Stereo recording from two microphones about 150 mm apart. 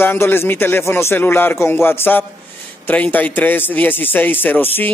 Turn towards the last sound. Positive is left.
turn(degrees=15)  # may be behind; listen again after turning